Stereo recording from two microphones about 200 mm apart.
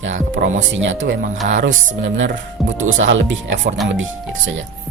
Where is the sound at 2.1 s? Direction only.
70° right (ahead or behind).